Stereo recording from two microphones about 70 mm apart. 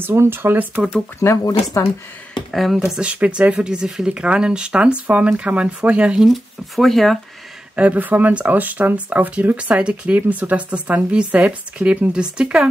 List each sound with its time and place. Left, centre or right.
0.0 s speech: right
1.4 s speech: left
2.5 s speech: centre
3.0 s speech: centre
6.2 s speech: centre
7.7 s speech: right